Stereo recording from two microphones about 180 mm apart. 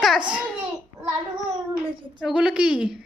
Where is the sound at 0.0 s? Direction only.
5° right (ahead or behind).